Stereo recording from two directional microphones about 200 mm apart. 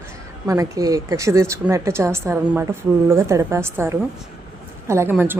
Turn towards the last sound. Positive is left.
turn(degrees=-10)  # may be behind; listen again after turning